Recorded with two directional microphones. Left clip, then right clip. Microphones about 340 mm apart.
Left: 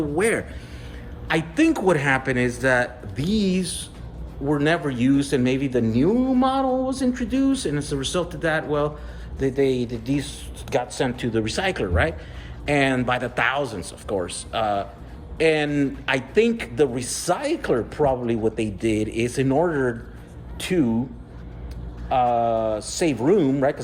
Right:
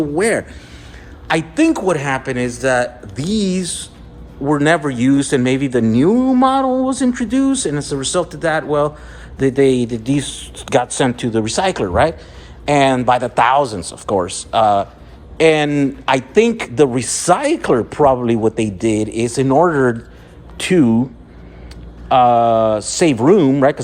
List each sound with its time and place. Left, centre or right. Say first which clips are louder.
0.2 s a man's voice: right 4 dB; centre
22.1 s speech: right 9 dB; right